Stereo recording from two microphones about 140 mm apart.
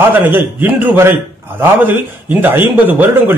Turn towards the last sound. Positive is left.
turn(degrees=-15)  # may be behind; listen again after turning